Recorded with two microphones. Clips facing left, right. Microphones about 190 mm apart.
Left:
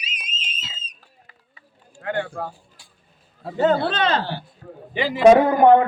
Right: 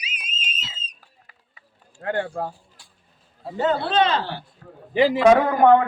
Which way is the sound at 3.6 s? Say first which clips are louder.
Left 1 dB; 50° left (ahead or behind).